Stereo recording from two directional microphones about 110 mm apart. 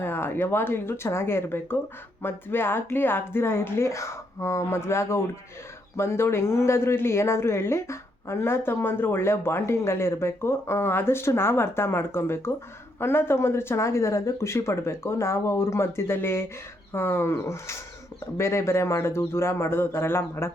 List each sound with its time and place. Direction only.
0.0 s speech: 20° left (ahead or behind)